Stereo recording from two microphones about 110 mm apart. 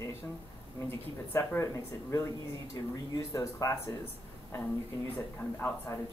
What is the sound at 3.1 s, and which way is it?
Speech, 30° left (ahead or behind).